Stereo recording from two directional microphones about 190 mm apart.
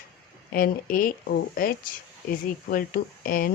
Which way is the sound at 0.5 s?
50° left (ahead or behind).